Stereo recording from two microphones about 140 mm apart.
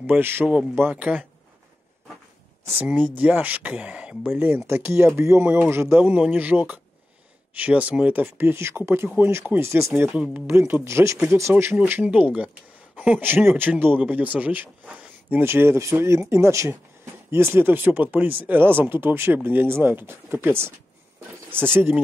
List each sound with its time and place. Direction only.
0.0 s speech: 15° right (ahead or behind)
2.8 s speech: 10° right (ahead or behind)